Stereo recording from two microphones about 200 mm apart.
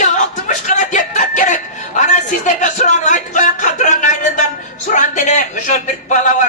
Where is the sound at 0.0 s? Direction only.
40° left (ahead or behind).